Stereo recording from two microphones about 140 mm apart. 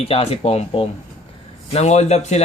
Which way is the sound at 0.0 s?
45° left (ahead or behind).